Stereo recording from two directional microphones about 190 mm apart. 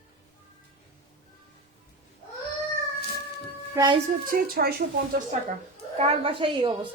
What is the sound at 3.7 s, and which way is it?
Speech, 25° right (ahead or behind).